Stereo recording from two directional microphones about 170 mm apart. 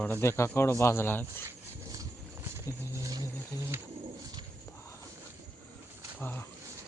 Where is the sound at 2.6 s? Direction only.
20° right (ahead or behind).